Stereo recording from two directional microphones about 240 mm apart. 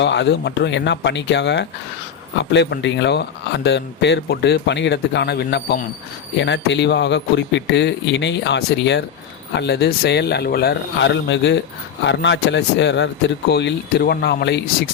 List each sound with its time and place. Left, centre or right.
0.0 s speech: left